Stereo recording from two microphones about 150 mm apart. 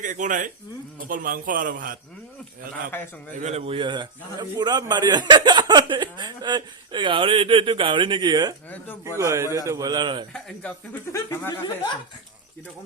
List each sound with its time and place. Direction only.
0.0 s a man's voice: 60° right (ahead or behind)
2.9 s speech: 15° left (ahead or behind)
3.3 s a man's voice: 45° right (ahead or behind); by 10.2 s 30° right (ahead or behind)
10.3 s speech: 5° left (ahead or behind)
11.1 s speech: 15° left (ahead or behind)